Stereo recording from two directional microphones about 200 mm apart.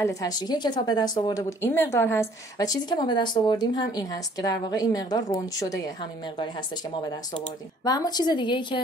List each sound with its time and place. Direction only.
0.0 s a woman's voice: 15° left (ahead or behind)
7.0 s a woman's voice: 20° left (ahead or behind)